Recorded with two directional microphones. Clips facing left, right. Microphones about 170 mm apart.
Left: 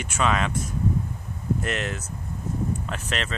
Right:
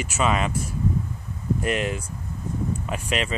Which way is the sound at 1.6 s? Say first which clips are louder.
Right 4 dB; 10° right (ahead or behind).